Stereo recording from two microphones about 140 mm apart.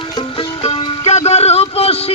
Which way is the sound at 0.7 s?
50° left (ahead or behind).